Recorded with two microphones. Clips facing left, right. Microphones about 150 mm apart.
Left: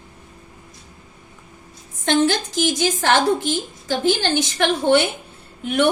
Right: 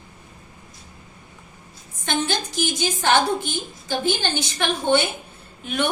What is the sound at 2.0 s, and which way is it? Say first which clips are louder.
A woman's voice: left 7 dB; 85° left.